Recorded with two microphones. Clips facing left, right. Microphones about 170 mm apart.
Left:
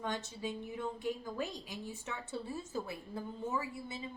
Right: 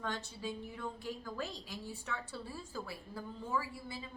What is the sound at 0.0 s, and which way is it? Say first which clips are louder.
A woman's voice: left 2 dB; 20° left (ahead or behind).